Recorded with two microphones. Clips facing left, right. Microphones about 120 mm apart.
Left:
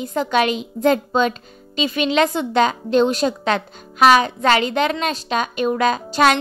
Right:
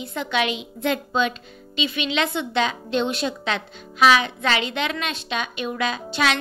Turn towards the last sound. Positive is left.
turn(degrees=45)  # may be behind; listen again after turning